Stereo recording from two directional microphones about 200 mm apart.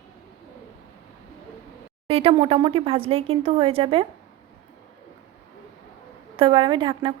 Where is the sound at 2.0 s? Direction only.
30° right (ahead or behind).